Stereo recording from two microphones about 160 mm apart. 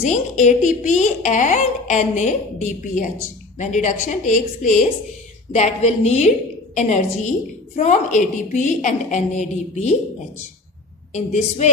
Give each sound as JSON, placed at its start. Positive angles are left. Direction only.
{"t": 0.0, "sound": "a woman's voice", "side_deg": 50}
{"t": 11.1, "sound": "a woman's voice", "side_deg": 45}